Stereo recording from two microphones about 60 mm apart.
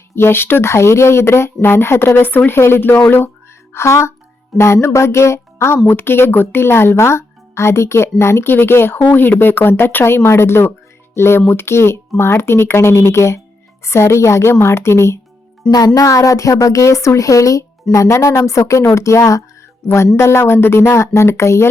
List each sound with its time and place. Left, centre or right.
0.2 s speech: left
2.1 s speech: left
15.6 s speech: centre
16.0 s a woman's voice: left
20.1 s speech: left